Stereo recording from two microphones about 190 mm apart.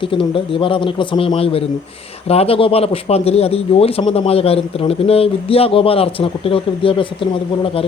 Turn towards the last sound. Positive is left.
turn(degrees=25)  # may be behind; listen again after turning